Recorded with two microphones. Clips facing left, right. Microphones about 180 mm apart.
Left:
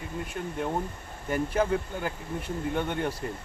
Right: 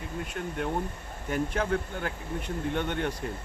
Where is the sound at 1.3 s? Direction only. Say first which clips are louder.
Left 2 dB; 5° left (ahead or behind).